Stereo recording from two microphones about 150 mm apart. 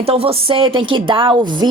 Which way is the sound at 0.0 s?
40° right (ahead or behind).